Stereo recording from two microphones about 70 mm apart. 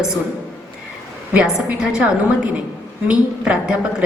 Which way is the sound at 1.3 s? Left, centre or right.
Centre.